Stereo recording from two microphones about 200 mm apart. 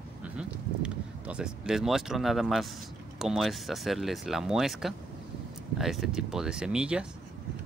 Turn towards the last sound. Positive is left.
turn(degrees=-5)  # may be behind; listen again after turning